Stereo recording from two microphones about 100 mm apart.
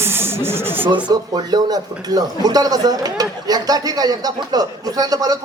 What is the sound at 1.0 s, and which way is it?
Speech, 40° right (ahead or behind).